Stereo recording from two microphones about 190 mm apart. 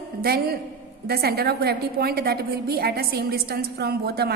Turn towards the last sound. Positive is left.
turn(degrees=-55)  # may be behind; listen again after turning